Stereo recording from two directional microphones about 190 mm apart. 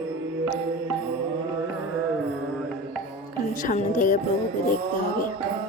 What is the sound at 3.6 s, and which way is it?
Music, 45° left (ahead or behind).